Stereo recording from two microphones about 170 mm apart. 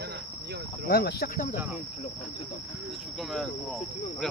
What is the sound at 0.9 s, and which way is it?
Speech, 65° left (ahead or behind).